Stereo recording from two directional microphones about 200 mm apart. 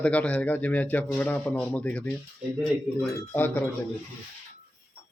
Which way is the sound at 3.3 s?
10° left (ahead or behind).